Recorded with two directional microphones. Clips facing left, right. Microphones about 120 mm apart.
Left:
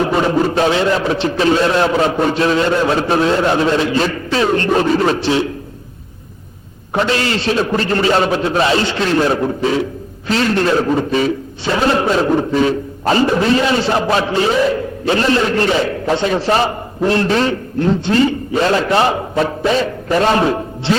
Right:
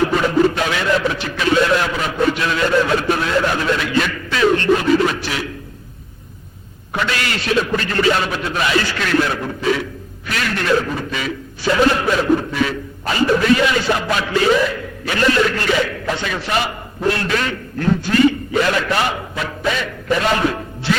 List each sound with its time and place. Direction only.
0.1 s a man's voice: 30° left (ahead or behind)
6.9 s a man's voice: 30° left (ahead or behind)